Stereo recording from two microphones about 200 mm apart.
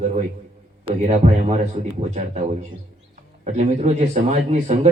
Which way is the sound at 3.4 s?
35° right (ahead or behind).